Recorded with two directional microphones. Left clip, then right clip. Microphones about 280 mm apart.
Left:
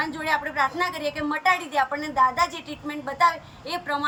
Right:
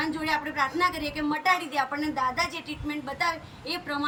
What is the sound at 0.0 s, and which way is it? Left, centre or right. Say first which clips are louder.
A woman's voice: left 3 dB; centre.